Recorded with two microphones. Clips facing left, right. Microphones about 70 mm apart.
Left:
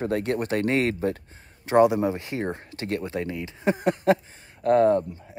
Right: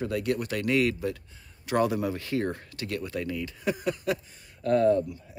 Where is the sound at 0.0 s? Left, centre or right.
Left.